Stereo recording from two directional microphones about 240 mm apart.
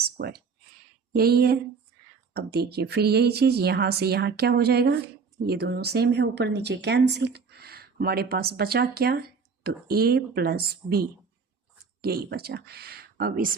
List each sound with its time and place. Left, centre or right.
0.0 s a sound: right
1.1 s speech: right
12.0 s speech: right